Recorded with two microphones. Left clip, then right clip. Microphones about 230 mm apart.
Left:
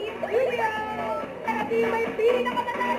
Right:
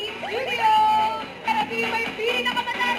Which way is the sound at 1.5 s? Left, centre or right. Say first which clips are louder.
Right 1 dB; right.